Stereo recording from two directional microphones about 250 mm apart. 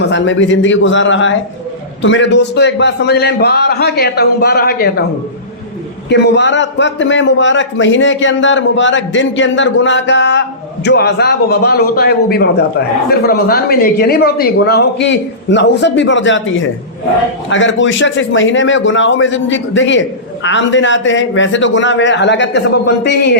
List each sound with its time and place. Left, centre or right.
0.1 s a man's voice: left
6.1 s a man's voice: left